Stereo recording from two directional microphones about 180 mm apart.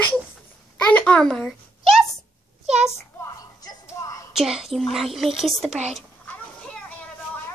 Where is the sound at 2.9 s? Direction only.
15° left (ahead or behind).